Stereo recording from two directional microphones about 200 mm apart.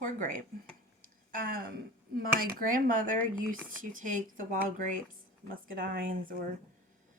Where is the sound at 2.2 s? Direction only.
45° right (ahead or behind).